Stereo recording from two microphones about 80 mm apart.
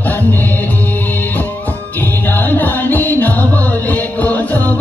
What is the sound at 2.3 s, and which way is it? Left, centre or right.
Music, left.